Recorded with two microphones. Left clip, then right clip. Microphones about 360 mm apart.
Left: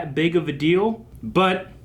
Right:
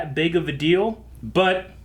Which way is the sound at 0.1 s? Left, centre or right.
Right.